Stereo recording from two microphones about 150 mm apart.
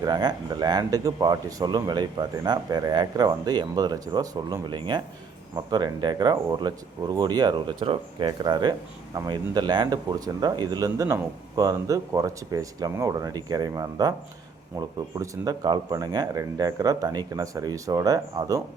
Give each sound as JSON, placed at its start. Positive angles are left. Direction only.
{"t": 0.0, "sound": "speech", "side_deg": -25}